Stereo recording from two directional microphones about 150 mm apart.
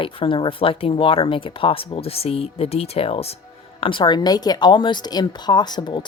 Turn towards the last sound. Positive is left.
turn(degrees=30)  # may be behind; listen again after turning